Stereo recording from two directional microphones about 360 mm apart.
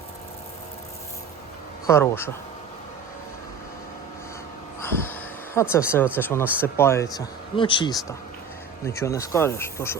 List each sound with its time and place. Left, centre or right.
1.9 s speech: centre
4.8 s vehicle: centre
5.5 s speech: centre
6.7 s speech: centre